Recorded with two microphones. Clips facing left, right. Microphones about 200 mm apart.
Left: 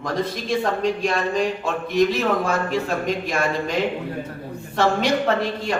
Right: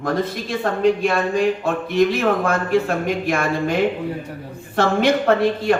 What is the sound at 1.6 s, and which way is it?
A man's voice, 55° right (ahead or behind).